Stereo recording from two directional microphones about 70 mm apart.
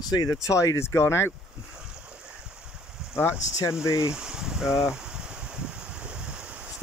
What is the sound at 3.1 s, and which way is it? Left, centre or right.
Speech, left.